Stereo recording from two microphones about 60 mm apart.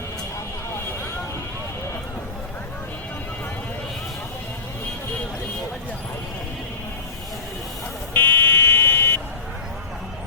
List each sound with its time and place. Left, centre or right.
8.1 s buzzer: left